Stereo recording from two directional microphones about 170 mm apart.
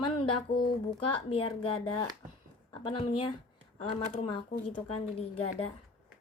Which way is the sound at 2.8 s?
30° left (ahead or behind).